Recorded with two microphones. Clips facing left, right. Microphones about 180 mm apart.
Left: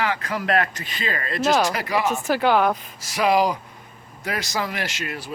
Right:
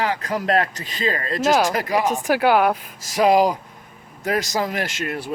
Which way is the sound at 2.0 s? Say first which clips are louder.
Right 1 dB; 15° right (ahead or behind).